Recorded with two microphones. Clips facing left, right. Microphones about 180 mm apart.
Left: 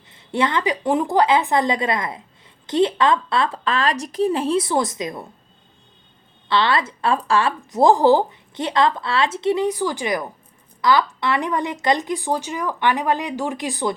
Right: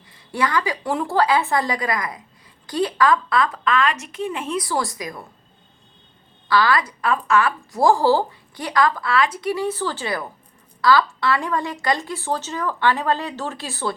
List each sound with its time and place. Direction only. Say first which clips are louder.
0.1 s a woman's voice: left 1 dB; 25° left (ahead or behind)
6.5 s a woman's voice: right 1 dB; 25° left (ahead or behind)